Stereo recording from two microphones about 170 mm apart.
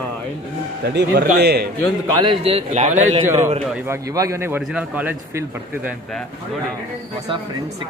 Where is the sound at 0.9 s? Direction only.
80° right.